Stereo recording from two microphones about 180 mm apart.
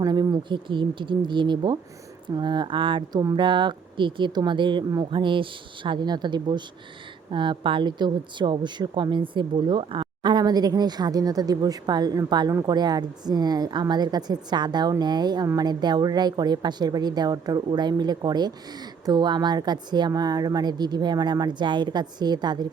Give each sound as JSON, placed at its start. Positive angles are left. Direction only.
{"t": 0.0, "sound": "a woman's voice", "side_deg": -20}